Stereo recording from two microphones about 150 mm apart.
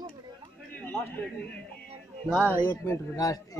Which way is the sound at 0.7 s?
15° left (ahead or behind).